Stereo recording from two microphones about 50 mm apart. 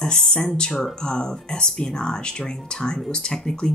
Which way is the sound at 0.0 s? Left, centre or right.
Centre.